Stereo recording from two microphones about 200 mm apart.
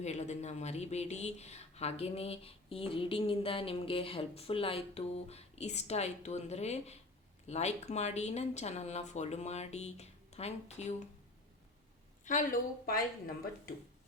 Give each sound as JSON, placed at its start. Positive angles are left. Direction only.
{"t": 0.0, "sound": "speech", "side_deg": 35}
{"t": 12.2, "sound": "speech", "side_deg": 40}